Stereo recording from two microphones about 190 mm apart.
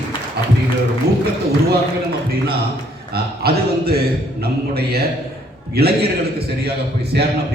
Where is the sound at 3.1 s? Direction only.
55° right (ahead or behind).